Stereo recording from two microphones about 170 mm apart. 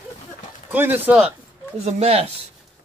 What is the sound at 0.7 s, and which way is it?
Speech, 10° right (ahead or behind).